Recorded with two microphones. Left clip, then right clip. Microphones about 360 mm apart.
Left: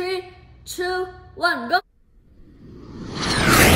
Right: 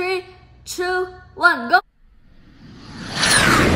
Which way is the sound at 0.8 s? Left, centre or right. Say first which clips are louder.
Right 3 dB; centre.